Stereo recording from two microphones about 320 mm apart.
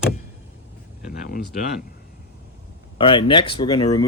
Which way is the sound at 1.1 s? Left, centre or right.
Left.